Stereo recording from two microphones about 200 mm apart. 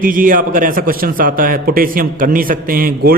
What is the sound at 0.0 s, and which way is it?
A man's voice, 40° right (ahead or behind).